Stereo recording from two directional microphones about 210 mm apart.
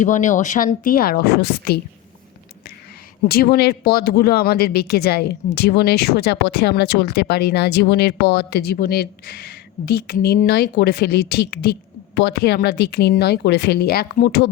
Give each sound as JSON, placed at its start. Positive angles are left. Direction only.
{"t": 0.0, "sound": "speech", "side_deg": 35}
{"t": 3.2, "sound": "speech", "side_deg": 45}